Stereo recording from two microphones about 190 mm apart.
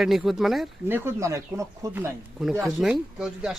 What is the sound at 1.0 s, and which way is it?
Speech, 15° right (ahead or behind).